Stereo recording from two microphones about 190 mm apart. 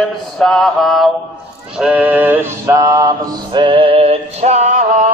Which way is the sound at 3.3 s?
25° right (ahead or behind).